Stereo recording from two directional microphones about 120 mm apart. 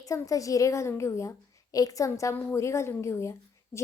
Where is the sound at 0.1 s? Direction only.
30° left (ahead or behind).